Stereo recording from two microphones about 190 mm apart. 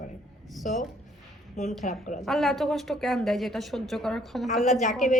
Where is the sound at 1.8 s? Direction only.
40° left (ahead or behind).